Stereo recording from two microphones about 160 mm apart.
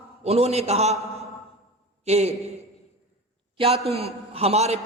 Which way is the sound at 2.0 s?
45° right (ahead or behind).